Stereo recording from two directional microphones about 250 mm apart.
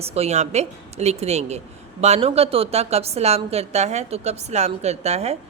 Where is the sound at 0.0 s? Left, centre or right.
Right.